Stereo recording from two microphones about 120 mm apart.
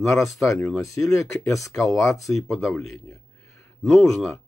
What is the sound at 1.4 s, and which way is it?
Speech, 25° left (ahead or behind).